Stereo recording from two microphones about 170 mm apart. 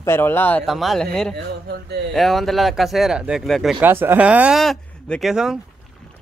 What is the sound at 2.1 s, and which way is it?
A man's voice, centre (ahead or behind).